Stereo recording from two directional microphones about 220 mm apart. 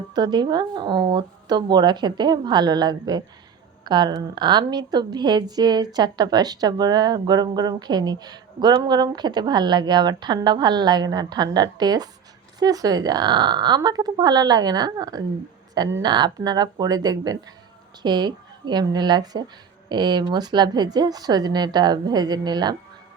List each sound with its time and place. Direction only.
0.1 s a woman's voice: 20° right (ahead or behind)